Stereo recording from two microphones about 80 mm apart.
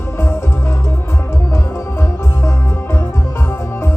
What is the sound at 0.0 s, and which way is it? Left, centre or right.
Music, left.